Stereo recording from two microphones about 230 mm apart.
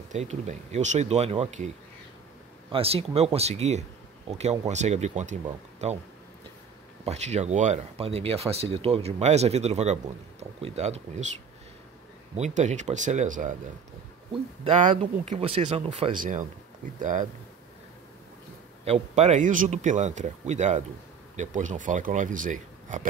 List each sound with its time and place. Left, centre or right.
0.1 s speech: right
2.7 s speech: right
7.1 s speech: right
12.4 s speech: right
14.6 s speech: right
18.9 s speech: right